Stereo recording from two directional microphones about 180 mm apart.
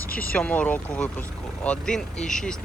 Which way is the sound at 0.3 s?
5° left (ahead or behind).